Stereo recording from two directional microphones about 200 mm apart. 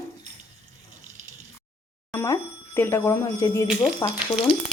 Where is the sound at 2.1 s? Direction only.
10° left (ahead or behind).